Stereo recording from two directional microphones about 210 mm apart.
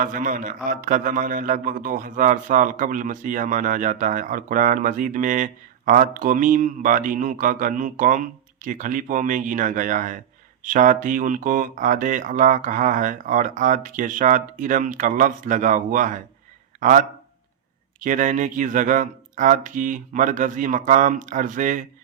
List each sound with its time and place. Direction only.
0.0 s a man's voice: 40° right (ahead or behind)